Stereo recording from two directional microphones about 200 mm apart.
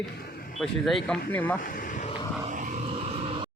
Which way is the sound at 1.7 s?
40° left (ahead or behind).